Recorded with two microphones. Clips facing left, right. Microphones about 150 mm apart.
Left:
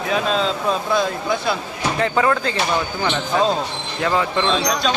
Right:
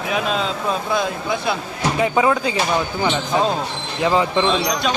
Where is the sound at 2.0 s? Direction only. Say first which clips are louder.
Right 1 dB; 10° right (ahead or behind).